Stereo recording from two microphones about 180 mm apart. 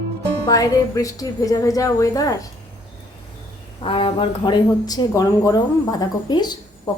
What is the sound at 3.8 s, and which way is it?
A woman's voice, 30° left (ahead or behind).